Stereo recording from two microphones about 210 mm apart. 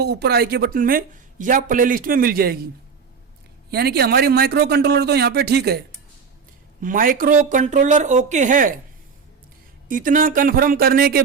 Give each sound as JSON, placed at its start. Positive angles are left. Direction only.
{"t": 0.0, "sound": "speech", "side_deg": -50}
{"t": 3.7, "sound": "speech", "side_deg": -50}
{"t": 6.8, "sound": "speech", "side_deg": -40}
{"t": 9.9, "sound": "speech", "side_deg": -40}